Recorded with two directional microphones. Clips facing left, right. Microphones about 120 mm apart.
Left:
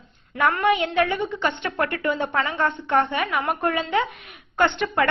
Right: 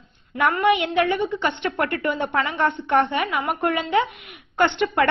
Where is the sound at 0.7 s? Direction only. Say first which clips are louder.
Right 1 dB; 20° right (ahead or behind).